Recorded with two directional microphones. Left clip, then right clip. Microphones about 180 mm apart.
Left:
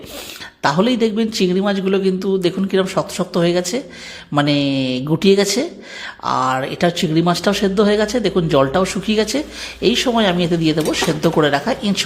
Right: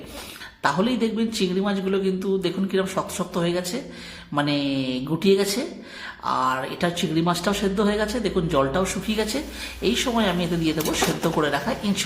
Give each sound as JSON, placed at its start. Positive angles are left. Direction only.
{"t": 0.6, "sound": "speech", "side_deg": 40}